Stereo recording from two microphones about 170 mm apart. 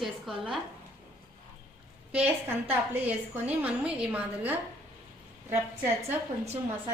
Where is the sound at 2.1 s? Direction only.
10° right (ahead or behind).